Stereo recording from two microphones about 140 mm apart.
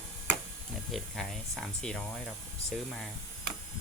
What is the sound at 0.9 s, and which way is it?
Speech, centre (ahead or behind).